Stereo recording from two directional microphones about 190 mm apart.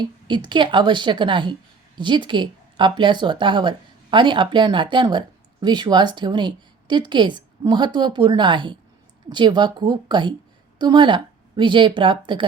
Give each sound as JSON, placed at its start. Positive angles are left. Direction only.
{"t": 0.0, "sound": "a woman's voice", "side_deg": -25}